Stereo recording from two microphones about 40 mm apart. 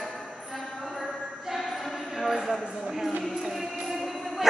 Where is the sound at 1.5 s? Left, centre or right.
Centre.